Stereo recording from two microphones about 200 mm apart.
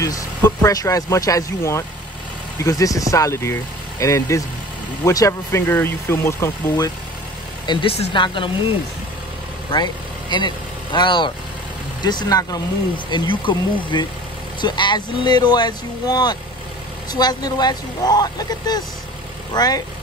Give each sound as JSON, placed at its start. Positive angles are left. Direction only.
{"t": 0.0, "sound": "speech", "side_deg": 15}
{"t": 7.6, "sound": "speech", "side_deg": 25}
{"t": 10.3, "sound": "speech", "side_deg": 25}